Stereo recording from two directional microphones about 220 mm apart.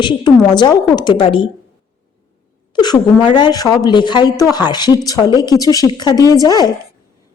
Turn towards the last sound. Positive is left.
turn(degrees=15)  # may be behind; listen again after turning